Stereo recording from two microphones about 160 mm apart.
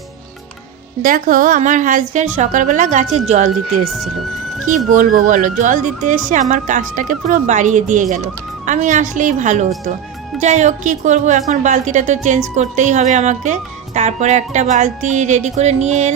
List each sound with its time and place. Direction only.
1.0 s speech: 55° right (ahead or behind)
4.9 s speech: 55° right (ahead or behind)